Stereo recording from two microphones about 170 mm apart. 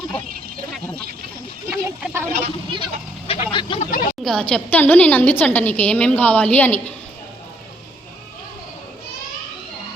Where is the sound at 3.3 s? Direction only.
35° left (ahead or behind).